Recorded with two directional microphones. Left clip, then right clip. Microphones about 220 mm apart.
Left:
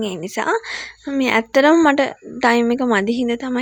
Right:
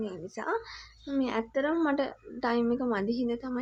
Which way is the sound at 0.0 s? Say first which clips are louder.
Left 14 dB; 35° left (ahead or behind).